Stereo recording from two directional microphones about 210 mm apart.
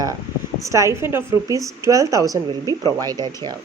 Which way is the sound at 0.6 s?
15° right (ahead or behind).